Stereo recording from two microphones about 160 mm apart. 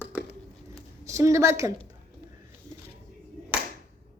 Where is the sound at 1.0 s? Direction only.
20° right (ahead or behind).